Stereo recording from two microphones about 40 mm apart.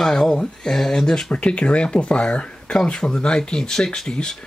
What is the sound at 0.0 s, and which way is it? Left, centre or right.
Speech, centre.